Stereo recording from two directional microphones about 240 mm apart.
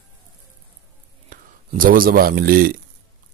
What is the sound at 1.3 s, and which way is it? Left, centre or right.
Speech, right.